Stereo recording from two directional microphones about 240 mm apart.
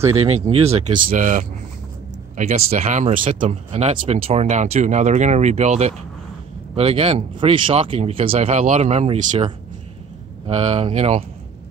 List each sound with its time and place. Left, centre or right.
0.2 s speech: right